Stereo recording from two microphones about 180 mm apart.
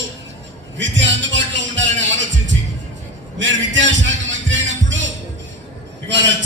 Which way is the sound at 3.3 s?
90° right.